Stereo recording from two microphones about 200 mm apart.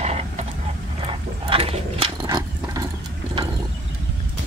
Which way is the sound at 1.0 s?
30° right (ahead or behind).